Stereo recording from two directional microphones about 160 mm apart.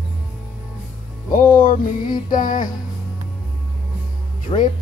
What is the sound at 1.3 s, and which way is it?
Music, 60° left (ahead or behind).